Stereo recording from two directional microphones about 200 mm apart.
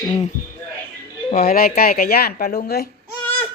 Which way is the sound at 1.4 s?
50° left (ahead or behind).